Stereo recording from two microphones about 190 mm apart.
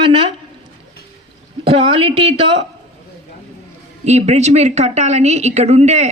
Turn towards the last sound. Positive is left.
turn(degrees=-35)  # may be behind; listen again after turning